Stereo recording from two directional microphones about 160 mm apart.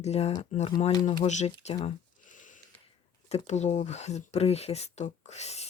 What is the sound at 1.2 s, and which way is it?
Speech, 45° left (ahead or behind).